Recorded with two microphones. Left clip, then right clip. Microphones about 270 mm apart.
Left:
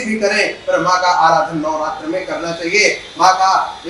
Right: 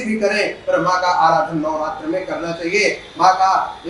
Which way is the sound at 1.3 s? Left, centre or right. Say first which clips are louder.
Left 2 dB; centre.